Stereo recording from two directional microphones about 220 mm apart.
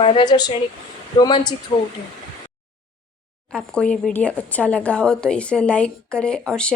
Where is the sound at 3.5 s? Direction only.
5° left (ahead or behind).